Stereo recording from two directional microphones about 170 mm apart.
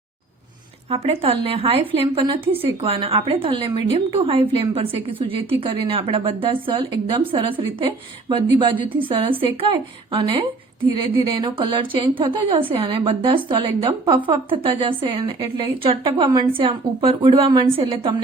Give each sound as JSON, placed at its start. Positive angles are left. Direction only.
{"t": 0.9, "sound": "a woman's voice", "side_deg": -35}